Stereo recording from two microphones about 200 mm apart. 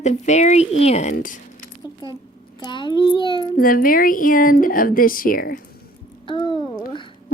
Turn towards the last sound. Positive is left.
turn(degrees=25)  # may be behind; listen again after turning